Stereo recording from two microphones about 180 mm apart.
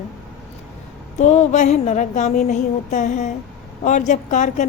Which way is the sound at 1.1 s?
40° left (ahead or behind).